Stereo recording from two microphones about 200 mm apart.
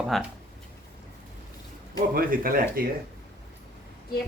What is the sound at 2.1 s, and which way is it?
Speech, 45° right (ahead or behind).